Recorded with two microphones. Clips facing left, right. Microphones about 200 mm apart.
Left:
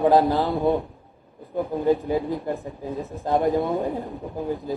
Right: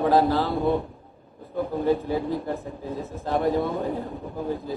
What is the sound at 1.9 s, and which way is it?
Speech, 15° left (ahead or behind).